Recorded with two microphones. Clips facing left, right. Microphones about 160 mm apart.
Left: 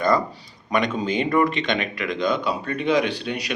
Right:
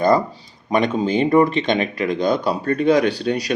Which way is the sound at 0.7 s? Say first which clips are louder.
Right 4 dB; 35° right (ahead or behind).